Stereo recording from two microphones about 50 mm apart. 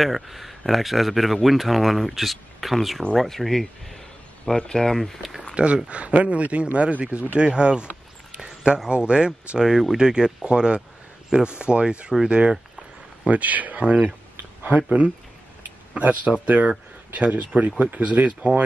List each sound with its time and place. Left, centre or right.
0.0 s speech: centre
5.5 s a man's voice: centre
13.3 s speech: right
15.9 s speech: right